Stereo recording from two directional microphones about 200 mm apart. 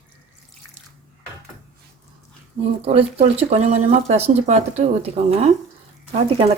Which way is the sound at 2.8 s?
30° right (ahead or behind).